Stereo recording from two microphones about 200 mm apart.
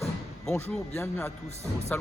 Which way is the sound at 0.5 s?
10° left (ahead or behind).